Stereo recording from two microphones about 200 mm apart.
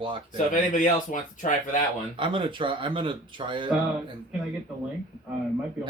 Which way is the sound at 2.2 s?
25° right (ahead or behind).